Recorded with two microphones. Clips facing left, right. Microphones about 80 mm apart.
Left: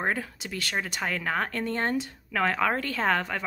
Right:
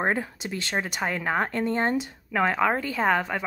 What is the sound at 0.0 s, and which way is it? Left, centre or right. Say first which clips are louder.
Speech: right 3 dB; right.